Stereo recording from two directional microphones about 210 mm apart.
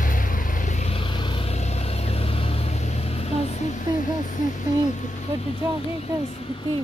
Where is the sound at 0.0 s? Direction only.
40° left (ahead or behind).